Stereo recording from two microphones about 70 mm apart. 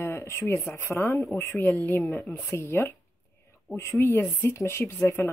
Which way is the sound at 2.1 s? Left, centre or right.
Centre.